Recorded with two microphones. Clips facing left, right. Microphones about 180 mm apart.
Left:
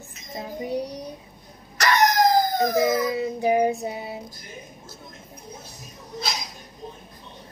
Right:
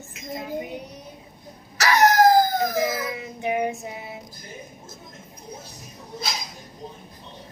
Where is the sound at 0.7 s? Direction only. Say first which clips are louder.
Left 8 dB; 35° left (ahead or behind).